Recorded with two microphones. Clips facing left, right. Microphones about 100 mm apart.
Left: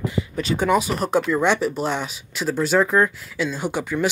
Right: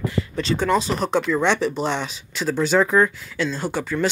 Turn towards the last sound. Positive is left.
turn(degrees=10)  # may be behind; listen again after turning